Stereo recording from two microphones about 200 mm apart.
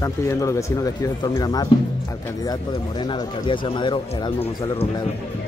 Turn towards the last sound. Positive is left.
turn(degrees=25)  # may be behind; listen again after turning